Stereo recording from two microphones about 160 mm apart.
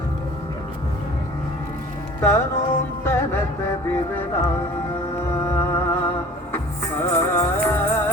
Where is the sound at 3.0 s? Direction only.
15° left (ahead or behind).